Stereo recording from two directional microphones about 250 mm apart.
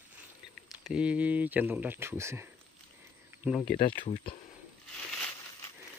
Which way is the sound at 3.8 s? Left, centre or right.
Centre.